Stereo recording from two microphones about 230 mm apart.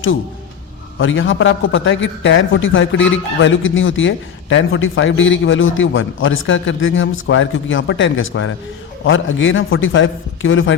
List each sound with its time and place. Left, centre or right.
0.9 s a man's voice: left